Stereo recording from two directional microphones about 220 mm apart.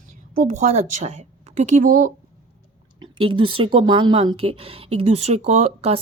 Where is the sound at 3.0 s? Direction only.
25° right (ahead or behind).